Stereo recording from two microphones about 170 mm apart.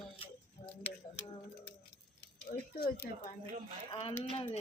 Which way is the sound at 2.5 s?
65° left (ahead or behind).